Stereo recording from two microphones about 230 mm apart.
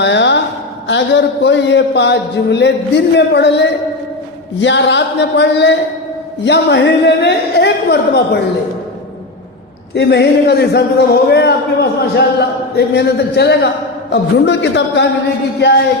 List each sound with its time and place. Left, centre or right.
0.0 s a woman's voice: left
9.9 s speech: left